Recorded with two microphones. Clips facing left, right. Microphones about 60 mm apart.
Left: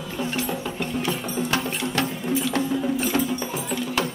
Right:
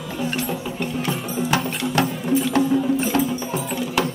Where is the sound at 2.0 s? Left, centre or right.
Centre.